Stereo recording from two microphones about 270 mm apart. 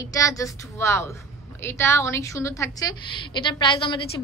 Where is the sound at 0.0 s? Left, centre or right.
Centre.